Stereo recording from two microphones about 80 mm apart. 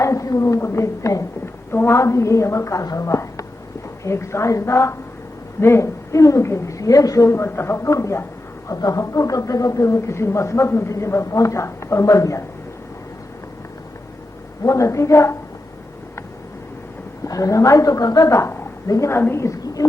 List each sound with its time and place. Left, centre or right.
0.0 s a woman's voice: left
7.3 s speech: left
14.6 s speech: left
17.2 s a woman's voice: left